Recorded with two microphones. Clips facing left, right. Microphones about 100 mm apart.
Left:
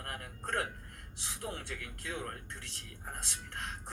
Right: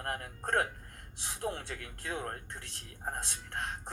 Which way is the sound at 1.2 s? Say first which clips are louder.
Right 5 dB; 50° right (ahead or behind).